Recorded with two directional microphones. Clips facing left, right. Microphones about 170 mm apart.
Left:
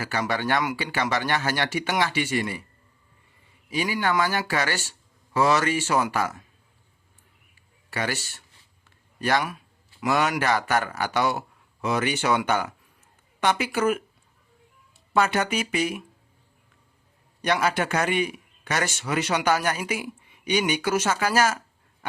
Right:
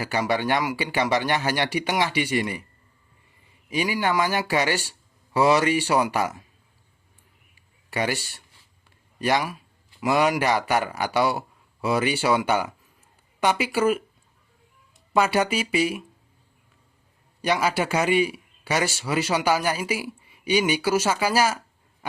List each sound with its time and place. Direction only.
0.0 s a man's voice: 15° right (ahead or behind)
3.7 s a man's voice: 15° right (ahead or behind)
7.9 s a man's voice: 15° right (ahead or behind)
15.1 s a man's voice: 10° right (ahead or behind)
17.4 s a man's voice: 10° right (ahead or behind)